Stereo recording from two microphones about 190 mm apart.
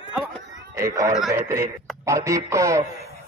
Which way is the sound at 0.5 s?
15° right (ahead or behind).